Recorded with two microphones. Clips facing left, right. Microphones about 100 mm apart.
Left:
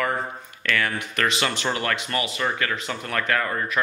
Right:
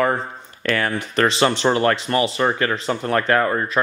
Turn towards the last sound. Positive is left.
turn(degrees=-35)  # may be behind; listen again after turning